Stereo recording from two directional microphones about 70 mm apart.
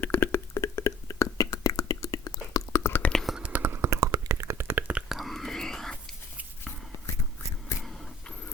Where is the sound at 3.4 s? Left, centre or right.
Right.